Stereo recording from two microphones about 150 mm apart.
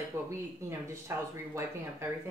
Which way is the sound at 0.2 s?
20° right (ahead or behind).